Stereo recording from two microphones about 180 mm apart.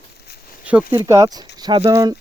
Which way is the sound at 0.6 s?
5° right (ahead or behind).